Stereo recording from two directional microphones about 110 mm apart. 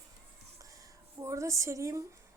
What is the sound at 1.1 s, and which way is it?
Speech, 30° right (ahead or behind).